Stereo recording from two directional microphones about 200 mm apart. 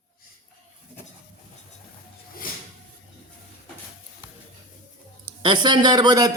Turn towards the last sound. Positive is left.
turn(degrees=-20)  # may be behind; listen again after turning